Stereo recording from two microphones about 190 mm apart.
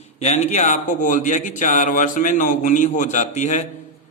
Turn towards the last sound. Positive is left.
turn(degrees=40)  # may be behind; listen again after turning